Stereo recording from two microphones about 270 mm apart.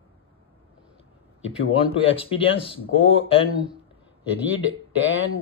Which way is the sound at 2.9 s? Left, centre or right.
Left.